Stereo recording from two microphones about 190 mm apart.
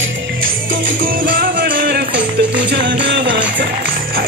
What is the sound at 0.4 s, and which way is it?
Music, 50° right (ahead or behind).